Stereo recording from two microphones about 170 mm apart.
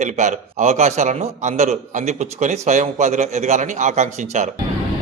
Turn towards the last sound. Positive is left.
turn(degrees=-45)  # may be behind; listen again after turning